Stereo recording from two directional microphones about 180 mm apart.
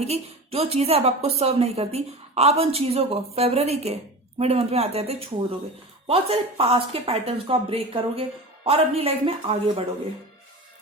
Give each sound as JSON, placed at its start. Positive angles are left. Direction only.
{"t": 0.0, "sound": "a woman's voice", "side_deg": -35}